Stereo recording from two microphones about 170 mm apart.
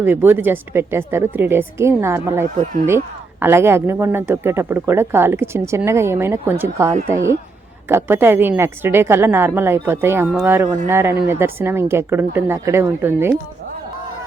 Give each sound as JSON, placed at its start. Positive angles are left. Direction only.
{"t": 0.0, "sound": "speech", "side_deg": -10}